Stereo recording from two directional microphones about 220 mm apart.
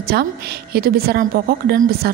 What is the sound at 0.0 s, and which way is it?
A woman's voice, 45° right (ahead or behind).